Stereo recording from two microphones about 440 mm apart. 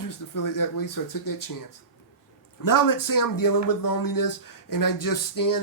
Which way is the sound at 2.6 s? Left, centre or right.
Left.